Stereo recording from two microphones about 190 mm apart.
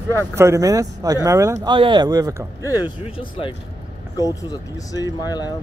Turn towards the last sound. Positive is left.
turn(degrees=20)  # may be behind; listen again after turning